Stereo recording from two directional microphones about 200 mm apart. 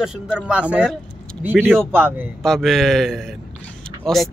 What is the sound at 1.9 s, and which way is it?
Speech, 10° right (ahead or behind).